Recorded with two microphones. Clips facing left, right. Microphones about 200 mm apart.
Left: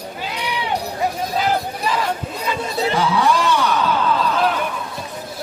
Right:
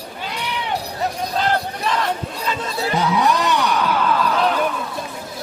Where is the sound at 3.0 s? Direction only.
20° right (ahead or behind).